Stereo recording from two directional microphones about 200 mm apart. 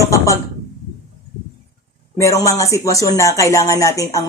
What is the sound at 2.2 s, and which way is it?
Speech, 15° left (ahead or behind).